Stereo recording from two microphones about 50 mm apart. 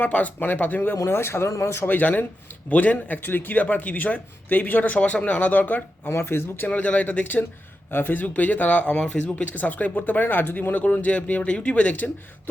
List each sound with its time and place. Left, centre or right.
0.0 s a man's voice: left
0.9 s speech: left
1.9 s a man's voice: left
6.1 s speech: left
6.7 s a man's voice: left
7.9 s a man's voice: left